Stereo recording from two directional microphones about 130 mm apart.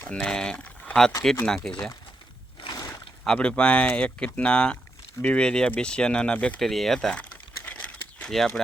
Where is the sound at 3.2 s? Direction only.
5° left (ahead or behind).